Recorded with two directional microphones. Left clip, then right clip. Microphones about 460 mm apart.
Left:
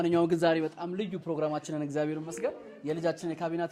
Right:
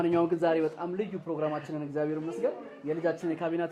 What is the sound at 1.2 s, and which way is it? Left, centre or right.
Speech, left.